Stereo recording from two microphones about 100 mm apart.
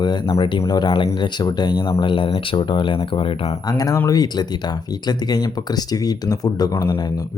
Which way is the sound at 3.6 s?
40° left (ahead or behind).